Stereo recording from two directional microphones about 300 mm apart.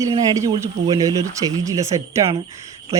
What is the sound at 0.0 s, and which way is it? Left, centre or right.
A man's voice, centre.